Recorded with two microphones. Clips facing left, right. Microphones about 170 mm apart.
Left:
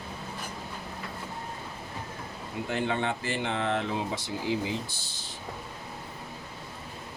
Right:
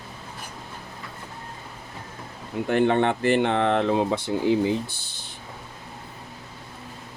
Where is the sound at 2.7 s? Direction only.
60° right (ahead or behind).